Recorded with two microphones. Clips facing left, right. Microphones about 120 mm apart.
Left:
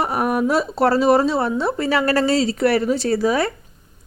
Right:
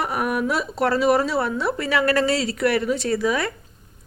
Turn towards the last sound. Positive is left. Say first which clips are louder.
# left 4 dB
turn(degrees=35)  # may be behind; listen again after turning